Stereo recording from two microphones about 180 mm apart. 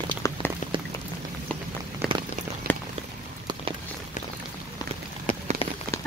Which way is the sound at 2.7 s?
10° left (ahead or behind).